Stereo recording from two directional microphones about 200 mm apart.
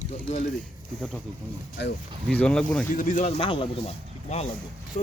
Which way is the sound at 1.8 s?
55° left (ahead or behind).